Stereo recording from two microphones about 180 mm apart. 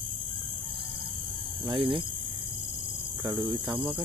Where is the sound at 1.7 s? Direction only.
30° right (ahead or behind).